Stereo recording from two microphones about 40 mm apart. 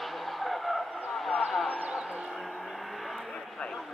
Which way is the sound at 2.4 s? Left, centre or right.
Centre.